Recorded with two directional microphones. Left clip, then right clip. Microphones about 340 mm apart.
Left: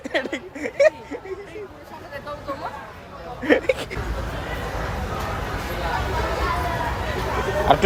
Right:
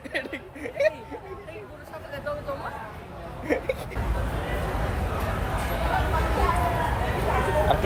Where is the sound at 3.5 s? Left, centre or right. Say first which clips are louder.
Left 8 dB; left.